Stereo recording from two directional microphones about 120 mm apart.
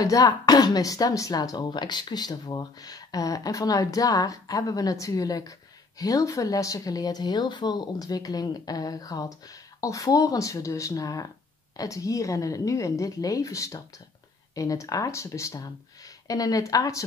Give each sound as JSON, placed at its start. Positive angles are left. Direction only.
{"t": 0.0, "sound": "speech", "side_deg": 30}